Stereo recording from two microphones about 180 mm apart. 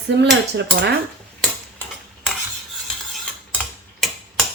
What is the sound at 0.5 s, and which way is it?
Cutlery, 70° right (ahead or behind).